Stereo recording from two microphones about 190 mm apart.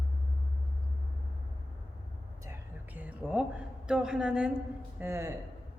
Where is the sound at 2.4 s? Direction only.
10° right (ahead or behind).